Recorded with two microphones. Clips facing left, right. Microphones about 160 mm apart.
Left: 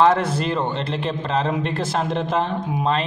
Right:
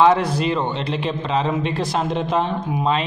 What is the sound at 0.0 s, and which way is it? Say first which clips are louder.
A man's voice: right 1 dB; centre (ahead or behind).